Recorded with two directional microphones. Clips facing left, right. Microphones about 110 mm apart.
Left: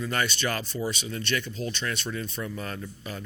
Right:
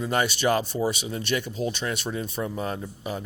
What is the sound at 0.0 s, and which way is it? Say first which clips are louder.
Speech: right 5 dB; 15° right (ahead or behind).